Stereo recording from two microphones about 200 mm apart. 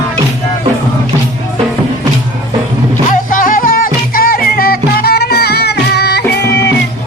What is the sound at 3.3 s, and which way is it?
Music, 45° left (ahead or behind).